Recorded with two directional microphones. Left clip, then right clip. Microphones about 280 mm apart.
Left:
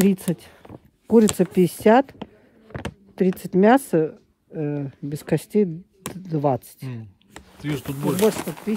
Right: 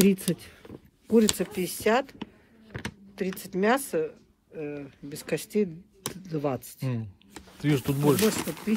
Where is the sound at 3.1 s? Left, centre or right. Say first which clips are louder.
Left 11 dB; left.